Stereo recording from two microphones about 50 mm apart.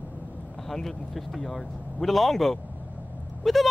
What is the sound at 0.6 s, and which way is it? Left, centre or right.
A man's voice, centre.